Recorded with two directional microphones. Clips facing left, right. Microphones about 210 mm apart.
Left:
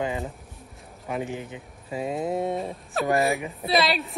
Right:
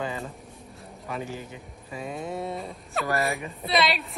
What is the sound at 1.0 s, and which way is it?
Speech, 20° left (ahead or behind).